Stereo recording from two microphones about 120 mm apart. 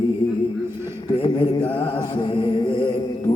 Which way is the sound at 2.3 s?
40° left (ahead or behind).